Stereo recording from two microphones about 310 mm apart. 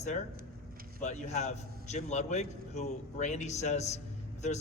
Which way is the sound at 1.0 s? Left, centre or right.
Left.